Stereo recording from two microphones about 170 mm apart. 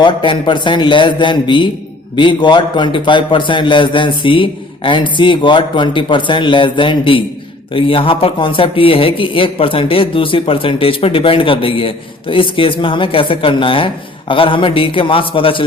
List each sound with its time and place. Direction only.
0.0 s a man's voice: 30° left (ahead or behind)